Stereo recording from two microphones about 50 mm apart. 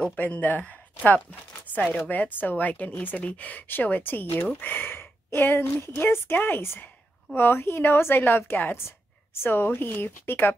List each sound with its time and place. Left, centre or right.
0.2 s speech: left
8.8 s a woman's voice: left